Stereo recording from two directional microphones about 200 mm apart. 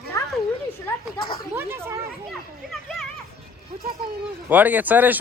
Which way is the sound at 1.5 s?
10° right (ahead or behind).